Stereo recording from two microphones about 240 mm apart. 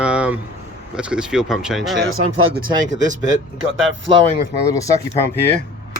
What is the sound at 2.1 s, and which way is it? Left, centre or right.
Speech, right.